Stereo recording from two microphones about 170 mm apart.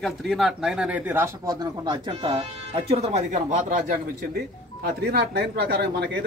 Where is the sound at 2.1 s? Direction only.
35° right (ahead or behind).